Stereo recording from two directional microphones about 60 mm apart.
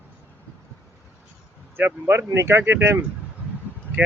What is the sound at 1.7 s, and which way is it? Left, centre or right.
Speech, right.